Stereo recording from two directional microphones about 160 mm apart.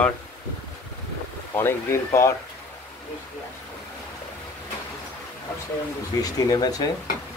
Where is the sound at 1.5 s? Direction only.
15° left (ahead or behind).